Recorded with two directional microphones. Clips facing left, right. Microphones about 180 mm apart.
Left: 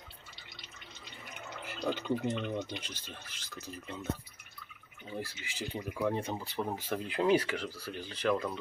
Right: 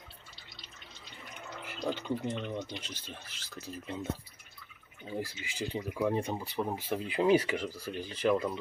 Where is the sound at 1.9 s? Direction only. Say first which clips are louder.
Left 2 dB; 5° left (ahead or behind).